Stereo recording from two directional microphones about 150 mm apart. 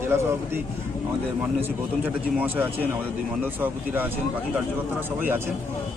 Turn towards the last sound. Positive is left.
turn(degrees=-15)  # may be behind; listen again after turning